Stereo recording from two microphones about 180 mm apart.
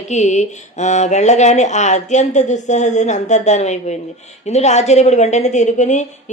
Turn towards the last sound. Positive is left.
turn(degrees=40)  # may be behind; listen again after turning